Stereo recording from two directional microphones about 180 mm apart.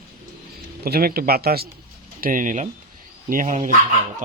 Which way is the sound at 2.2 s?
45° right (ahead or behind).